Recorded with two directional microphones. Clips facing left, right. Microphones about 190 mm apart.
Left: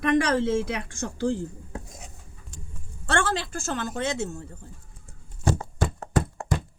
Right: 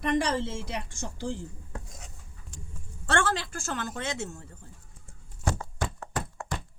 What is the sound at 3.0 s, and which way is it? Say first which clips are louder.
A woman's voice: left 2 dB; 25° left (ahead or behind).